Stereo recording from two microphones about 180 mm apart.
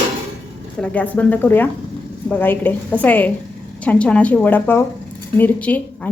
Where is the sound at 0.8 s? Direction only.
10° left (ahead or behind).